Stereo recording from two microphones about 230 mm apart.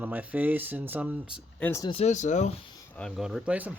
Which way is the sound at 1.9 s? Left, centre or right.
Left.